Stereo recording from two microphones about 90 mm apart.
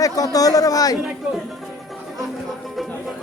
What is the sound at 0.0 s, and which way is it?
Speech, 40° left (ahead or behind).